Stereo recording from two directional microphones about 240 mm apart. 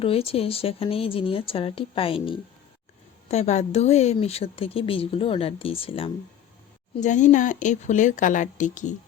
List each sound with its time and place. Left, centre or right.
0.0 s a woman's voice: left